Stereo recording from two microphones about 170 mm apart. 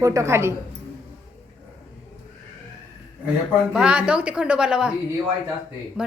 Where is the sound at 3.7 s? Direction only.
5° right (ahead or behind).